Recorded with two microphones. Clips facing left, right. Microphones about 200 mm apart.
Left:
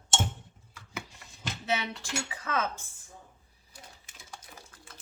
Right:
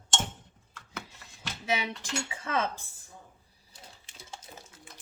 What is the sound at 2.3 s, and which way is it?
Speech, 25° right (ahead or behind).